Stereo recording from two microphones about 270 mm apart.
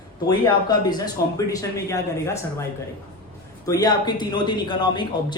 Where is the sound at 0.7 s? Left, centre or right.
Centre.